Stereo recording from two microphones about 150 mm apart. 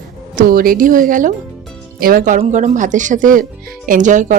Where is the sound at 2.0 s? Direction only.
75° right (ahead or behind).